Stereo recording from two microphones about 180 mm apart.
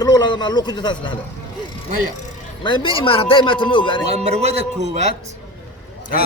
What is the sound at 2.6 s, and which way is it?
A man's voice, 25° left (ahead or behind).